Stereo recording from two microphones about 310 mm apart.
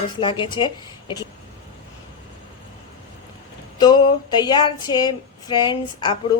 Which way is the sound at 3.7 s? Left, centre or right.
Centre.